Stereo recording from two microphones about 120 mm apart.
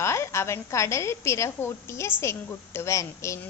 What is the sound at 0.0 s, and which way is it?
A woman's voice, 25° left (ahead or behind).